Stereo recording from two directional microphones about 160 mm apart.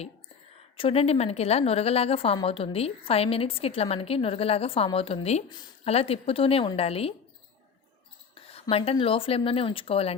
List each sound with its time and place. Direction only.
0.8 s a woman's voice: 35° left (ahead or behind)
8.4 s a sound: 35° left (ahead or behind)
8.7 s a woman's voice: 35° left (ahead or behind)